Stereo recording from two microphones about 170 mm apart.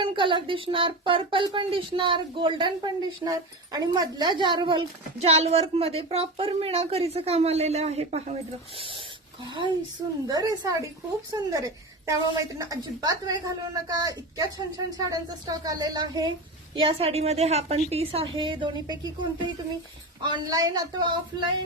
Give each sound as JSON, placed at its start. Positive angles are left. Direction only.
{"t": 0.0, "sound": "a woman's voice", "side_deg": -30}
{"t": 9.4, "sound": "a woman's voice", "side_deg": -30}